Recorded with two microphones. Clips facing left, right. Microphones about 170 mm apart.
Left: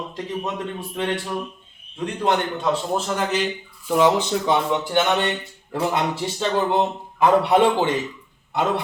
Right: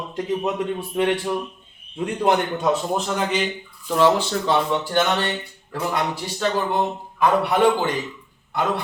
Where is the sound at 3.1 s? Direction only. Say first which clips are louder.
Even; centre (ahead or behind).